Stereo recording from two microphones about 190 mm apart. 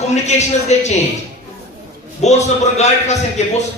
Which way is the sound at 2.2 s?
35° left (ahead or behind).